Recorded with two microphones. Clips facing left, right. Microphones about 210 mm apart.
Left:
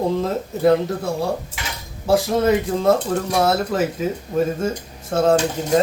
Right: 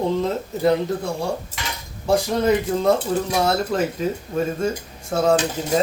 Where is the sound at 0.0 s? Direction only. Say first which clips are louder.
Left 1 dB; centre (ahead or behind).